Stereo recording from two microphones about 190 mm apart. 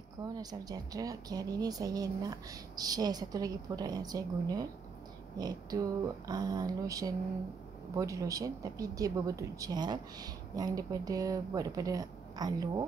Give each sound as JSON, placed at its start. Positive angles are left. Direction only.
{"t": 0.2, "sound": "speech", "side_deg": -20}